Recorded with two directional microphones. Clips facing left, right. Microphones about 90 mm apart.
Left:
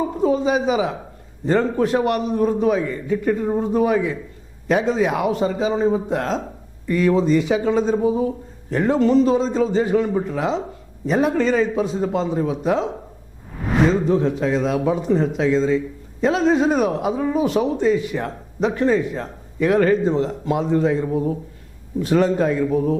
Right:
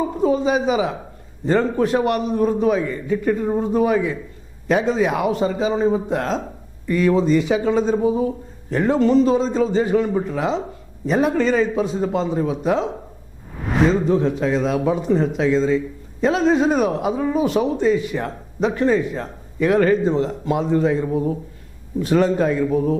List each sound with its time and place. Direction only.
0.0 s a man's voice: 25° right (ahead or behind)
13.6 s a sound: centre (ahead or behind)
14.4 s a man's voice: 20° right (ahead or behind)